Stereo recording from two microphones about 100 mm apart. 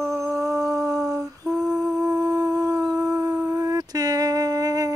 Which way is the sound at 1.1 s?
5° right (ahead or behind).